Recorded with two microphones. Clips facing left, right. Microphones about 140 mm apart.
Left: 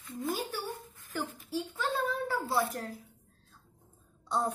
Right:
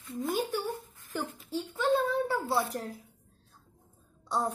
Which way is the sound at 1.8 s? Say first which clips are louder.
Right 7 dB; 20° right (ahead or behind).